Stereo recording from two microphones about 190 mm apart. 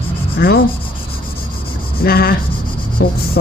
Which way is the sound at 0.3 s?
55° left (ahead or behind).